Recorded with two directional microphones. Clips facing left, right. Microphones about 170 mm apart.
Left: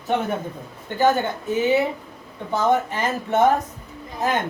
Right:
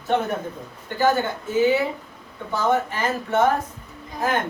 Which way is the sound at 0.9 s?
20° left (ahead or behind).